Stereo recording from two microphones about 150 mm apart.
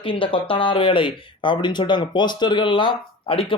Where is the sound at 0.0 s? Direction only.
35° left (ahead or behind).